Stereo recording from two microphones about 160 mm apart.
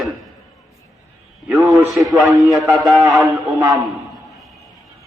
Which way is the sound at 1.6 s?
20° right (ahead or behind).